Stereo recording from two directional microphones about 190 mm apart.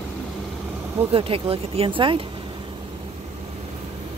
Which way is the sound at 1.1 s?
30° right (ahead or behind).